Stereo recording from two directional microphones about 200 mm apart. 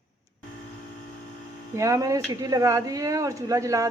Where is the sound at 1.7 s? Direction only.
15° right (ahead or behind).